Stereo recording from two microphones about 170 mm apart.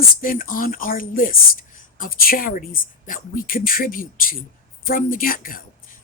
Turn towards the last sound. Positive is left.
turn(degrees=55)  # may be behind; listen again after turning